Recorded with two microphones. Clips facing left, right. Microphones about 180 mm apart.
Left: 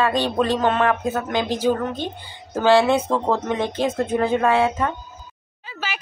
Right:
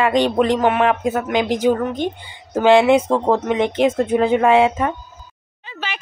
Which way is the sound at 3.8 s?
90° right.